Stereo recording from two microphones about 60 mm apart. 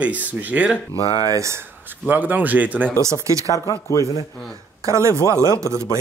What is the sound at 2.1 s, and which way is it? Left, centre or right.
Speech, right.